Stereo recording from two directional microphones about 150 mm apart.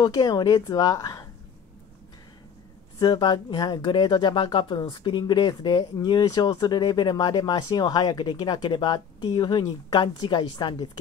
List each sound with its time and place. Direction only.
0.0 s speech: 25° left (ahead or behind)
3.0 s speech: 25° left (ahead or behind)